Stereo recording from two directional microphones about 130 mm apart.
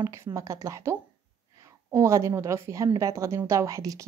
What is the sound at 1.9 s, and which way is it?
A woman's voice, 20° right (ahead or behind).